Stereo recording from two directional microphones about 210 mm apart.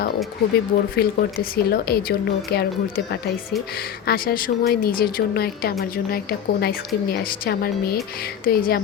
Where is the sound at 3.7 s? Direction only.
45° left (ahead or behind).